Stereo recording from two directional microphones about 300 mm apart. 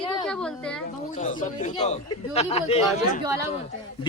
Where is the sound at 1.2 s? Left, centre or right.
Left.